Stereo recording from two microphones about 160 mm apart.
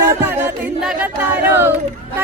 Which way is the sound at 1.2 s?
10° right (ahead or behind).